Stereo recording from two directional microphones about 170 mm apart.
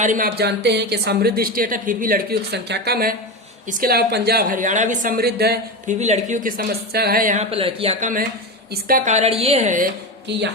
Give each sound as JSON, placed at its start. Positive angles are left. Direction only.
{"t": 0.0, "sound": "a woman's voice", "side_deg": -50}
{"t": 0.3, "sound": "a woman's voice", "side_deg": -75}
{"t": 5.9, "sound": "a woman's voice", "side_deg": -40}
{"t": 6.6, "sound": "a woman's voice", "side_deg": -65}
{"t": 7.5, "sound": "a woman's voice", "side_deg": -35}